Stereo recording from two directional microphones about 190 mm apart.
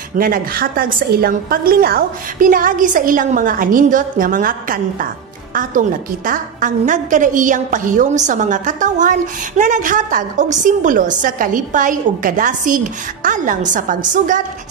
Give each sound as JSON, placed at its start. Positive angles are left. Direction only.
{"t": 0.2, "sound": "a woman's voice", "side_deg": -50}